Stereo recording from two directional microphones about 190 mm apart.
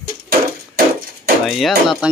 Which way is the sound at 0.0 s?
50° right (ahead or behind).